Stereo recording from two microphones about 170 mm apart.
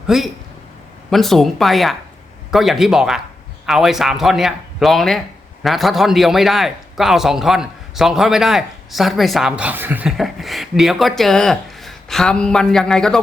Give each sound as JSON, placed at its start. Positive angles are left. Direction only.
{"t": 0.1, "sound": "a man's voice", "side_deg": -5}